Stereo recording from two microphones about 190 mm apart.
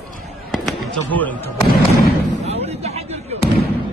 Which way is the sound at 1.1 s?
10° left (ahead or behind).